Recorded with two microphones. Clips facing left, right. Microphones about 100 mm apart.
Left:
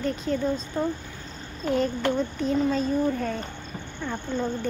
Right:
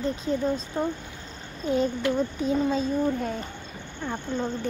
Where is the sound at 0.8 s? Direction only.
25° right (ahead or behind).